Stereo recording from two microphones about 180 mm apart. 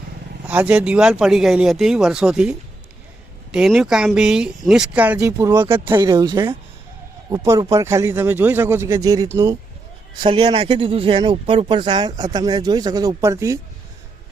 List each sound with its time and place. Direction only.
0.4 s a man's voice: 10° right (ahead or behind)